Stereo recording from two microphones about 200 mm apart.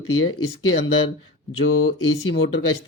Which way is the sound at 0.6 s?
75° left (ahead or behind).